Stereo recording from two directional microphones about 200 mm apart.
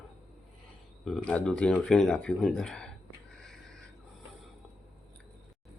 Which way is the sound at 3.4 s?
5° left (ahead or behind).